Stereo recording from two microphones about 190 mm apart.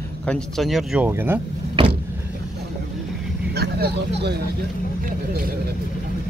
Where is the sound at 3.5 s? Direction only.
60° right (ahead or behind).